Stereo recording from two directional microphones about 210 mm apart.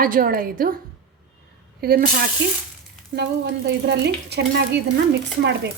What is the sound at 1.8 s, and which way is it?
A woman's voice, 45° right (ahead or behind).